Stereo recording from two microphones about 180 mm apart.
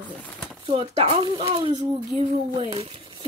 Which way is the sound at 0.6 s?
30° right (ahead or behind).